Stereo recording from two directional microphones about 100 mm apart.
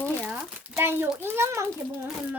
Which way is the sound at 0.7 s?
25° right (ahead or behind).